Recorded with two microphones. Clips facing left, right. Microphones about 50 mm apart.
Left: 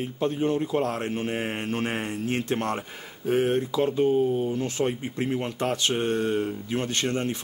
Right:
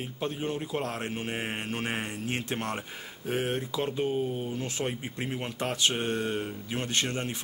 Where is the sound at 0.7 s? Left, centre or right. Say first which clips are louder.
Left 6 dB; centre.